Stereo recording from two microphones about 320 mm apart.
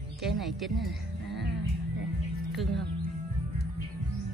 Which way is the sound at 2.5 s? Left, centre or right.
Centre.